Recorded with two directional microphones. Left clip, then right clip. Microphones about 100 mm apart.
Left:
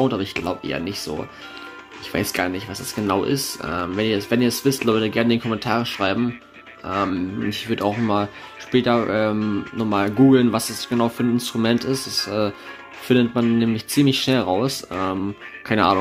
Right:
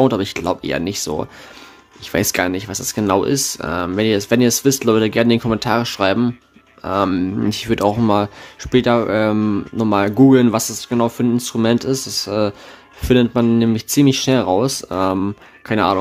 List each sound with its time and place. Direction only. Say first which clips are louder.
0.0 s speech: right 5 dB; 40° right (ahead or behind)
7.1 s speech: right 5 dB; 45° right (ahead or behind)
8.7 s speech: right 4 dB; 30° right (ahead or behind)
15.7 s speech: right 1 dB; 15° right (ahead or behind)